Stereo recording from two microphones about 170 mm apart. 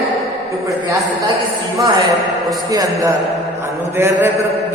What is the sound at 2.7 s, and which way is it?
Mantra, 20° right (ahead or behind).